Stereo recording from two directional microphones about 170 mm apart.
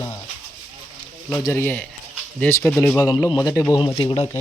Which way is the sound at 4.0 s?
30° left (ahead or behind).